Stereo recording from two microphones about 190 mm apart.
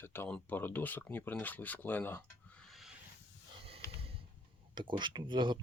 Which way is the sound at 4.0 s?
30° right (ahead or behind).